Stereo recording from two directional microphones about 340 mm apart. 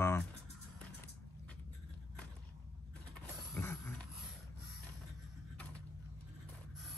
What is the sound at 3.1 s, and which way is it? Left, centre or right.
Mechanisms, centre.